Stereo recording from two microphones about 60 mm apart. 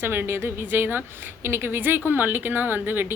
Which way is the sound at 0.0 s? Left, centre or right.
Right.